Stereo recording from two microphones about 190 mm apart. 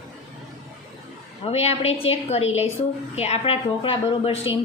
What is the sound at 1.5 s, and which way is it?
A woman's voice, 30° left (ahead or behind).